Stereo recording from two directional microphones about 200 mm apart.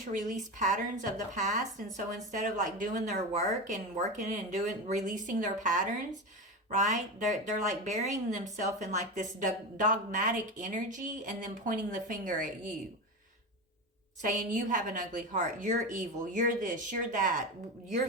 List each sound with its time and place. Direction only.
0.0 s speech: 40° right (ahead or behind)
14.2 s speech: 40° right (ahead or behind)